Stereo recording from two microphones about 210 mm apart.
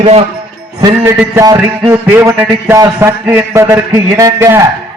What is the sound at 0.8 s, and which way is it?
A man's voice, 15° right (ahead or behind).